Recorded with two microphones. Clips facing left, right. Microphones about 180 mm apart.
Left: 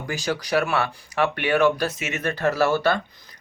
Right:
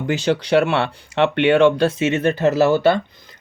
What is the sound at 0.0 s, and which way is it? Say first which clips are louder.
Speech: right 8 dB; 25° right (ahead or behind).